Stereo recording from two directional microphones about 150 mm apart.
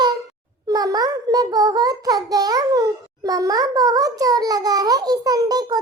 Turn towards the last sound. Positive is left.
turn(degrees=-25)  # may be behind; listen again after turning